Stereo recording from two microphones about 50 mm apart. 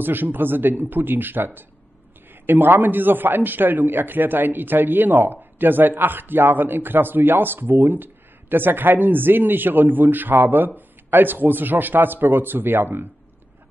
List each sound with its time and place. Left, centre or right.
0.0 s a man's voice: right